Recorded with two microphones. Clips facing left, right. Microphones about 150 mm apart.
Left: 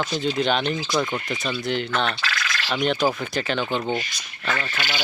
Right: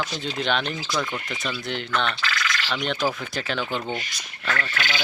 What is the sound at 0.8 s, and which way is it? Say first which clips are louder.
Speech: left 4 dB; 20° left (ahead or behind).